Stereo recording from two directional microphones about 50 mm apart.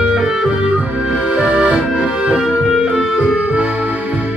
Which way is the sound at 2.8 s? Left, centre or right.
Centre.